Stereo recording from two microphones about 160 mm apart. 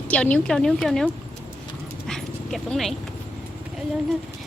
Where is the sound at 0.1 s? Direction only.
10° left (ahead or behind).